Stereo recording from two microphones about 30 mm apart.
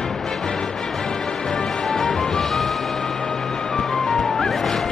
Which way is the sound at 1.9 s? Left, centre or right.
Centre.